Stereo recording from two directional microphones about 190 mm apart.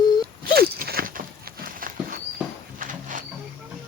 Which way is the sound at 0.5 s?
55° right (ahead or behind).